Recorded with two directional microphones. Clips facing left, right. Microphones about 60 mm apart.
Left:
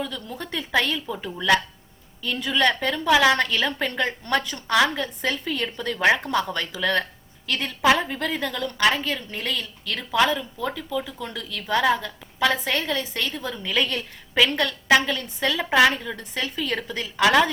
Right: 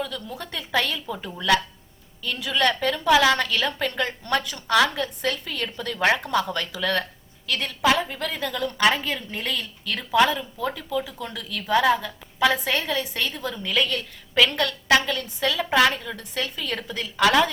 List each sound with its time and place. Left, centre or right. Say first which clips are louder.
0.5 s a woman's voice: left 2 dB; centre
8.5 s a woman's voice: right 2 dB; centre